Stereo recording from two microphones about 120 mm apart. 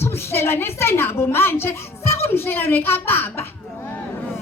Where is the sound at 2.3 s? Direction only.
20° left (ahead or behind).